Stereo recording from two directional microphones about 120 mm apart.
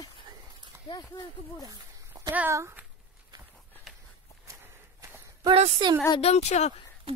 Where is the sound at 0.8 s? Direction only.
35° left (ahead or behind).